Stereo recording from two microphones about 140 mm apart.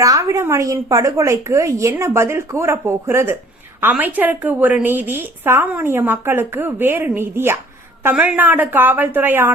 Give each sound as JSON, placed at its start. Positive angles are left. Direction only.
{"t": 0.0, "sound": "a woman's voice", "side_deg": -25}